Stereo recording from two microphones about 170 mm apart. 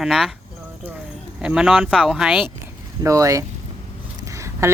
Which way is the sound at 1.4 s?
5° right (ahead or behind).